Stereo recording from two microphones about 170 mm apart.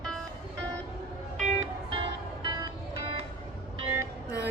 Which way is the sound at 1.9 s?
30° right (ahead or behind).